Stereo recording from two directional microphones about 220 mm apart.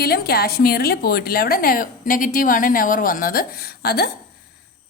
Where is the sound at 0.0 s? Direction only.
45° left (ahead or behind).